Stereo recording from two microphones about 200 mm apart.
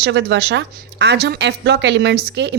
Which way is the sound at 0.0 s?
60° right (ahead or behind).